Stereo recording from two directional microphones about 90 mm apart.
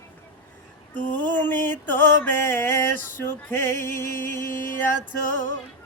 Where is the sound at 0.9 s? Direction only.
15° left (ahead or behind).